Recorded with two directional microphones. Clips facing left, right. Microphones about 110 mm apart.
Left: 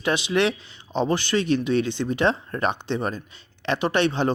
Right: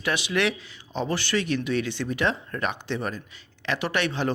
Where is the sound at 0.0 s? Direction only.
25° left (ahead or behind).